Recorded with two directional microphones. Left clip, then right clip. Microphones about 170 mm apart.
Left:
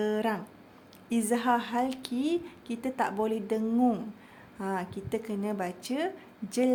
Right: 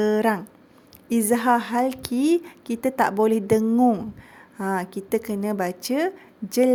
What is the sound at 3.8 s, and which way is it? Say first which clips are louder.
Speech: right 8 dB; 30° right (ahead or behind).